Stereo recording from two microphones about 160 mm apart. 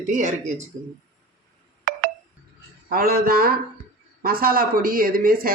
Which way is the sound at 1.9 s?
55° right (ahead or behind).